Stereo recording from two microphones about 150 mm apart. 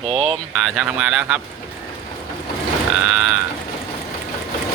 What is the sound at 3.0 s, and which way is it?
Speech, centre (ahead or behind).